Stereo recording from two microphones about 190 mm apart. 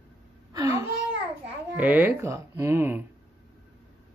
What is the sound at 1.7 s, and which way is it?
Speech, 10° right (ahead or behind).